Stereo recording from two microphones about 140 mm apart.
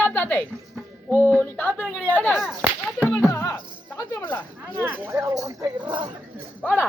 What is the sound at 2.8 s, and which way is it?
Whip, 10° left (ahead or behind).